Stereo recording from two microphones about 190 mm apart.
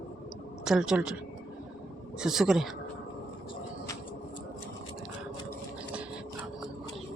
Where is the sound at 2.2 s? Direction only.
5° right (ahead or behind).